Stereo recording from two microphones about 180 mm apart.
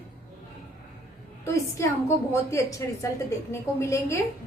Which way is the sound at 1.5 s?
15° left (ahead or behind).